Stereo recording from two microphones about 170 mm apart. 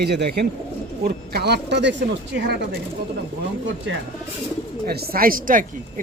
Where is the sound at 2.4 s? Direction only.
65° right (ahead or behind).